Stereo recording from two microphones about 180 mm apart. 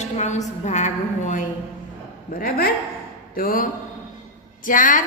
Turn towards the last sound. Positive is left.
turn(degrees=45)  # may be behind; listen again after turning